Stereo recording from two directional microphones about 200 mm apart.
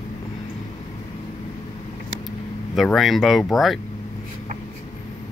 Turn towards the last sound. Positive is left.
turn(degrees=0)  # may be behind; listen again after turning